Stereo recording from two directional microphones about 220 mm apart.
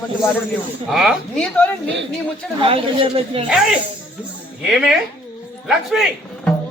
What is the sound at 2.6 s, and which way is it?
Speech, 25° right (ahead or behind).